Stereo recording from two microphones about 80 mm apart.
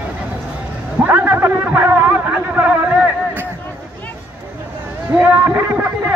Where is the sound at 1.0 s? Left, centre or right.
Right.